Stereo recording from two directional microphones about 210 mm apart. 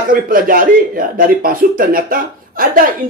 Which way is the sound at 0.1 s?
40° right (ahead or behind).